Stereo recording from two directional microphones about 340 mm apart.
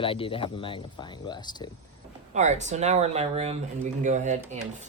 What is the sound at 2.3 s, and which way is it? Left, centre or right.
Speech, right.